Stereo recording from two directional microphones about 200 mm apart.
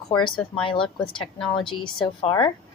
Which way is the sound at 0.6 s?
25° left (ahead or behind).